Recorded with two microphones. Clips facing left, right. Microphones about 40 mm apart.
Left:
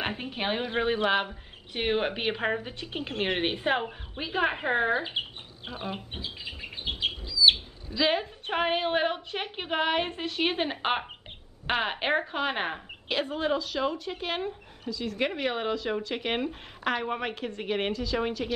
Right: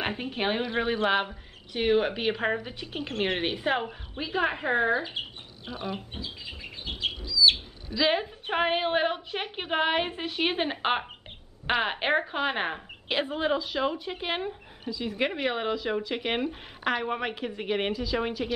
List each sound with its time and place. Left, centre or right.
0.0 s a woman's voice: centre
1.7 s a woman's voice: centre
6.1 s bird: left
7.5 s a woman's voice: centre
13.1 s a woman's voice: centre